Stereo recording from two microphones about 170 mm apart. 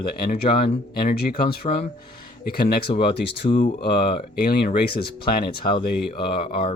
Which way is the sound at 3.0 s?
85° left.